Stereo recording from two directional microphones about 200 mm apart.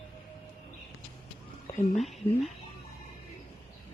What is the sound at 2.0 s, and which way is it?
Speech, centre (ahead or behind).